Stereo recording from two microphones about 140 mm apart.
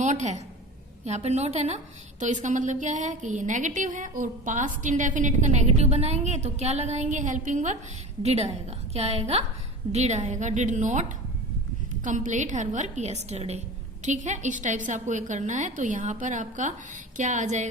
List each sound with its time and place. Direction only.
0.0 s a woman's voice: 55° right (ahead or behind)
12.0 s a woman's voice: 60° right (ahead or behind)